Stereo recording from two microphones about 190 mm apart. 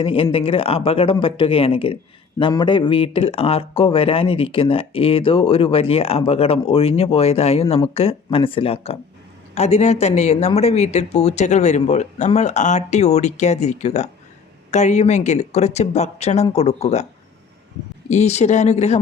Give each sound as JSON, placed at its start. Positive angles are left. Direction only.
{"t": 0.0, "sound": "speech", "side_deg": 30}
{"t": 18.1, "sound": "speech", "side_deg": 35}